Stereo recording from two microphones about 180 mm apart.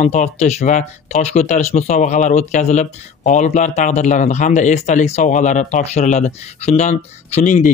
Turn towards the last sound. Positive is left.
turn(degrees=40)  # may be behind; listen again after turning